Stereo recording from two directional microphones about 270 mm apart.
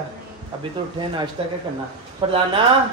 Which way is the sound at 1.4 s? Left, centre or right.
Centre.